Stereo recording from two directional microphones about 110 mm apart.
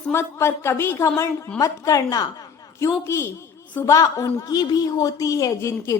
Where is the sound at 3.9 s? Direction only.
30° left (ahead or behind).